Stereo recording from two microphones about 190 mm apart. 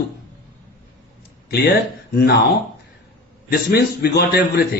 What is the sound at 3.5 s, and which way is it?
Speech, 55° left (ahead or behind).